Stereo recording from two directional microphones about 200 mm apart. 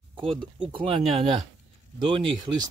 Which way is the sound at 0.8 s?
25° right (ahead or behind).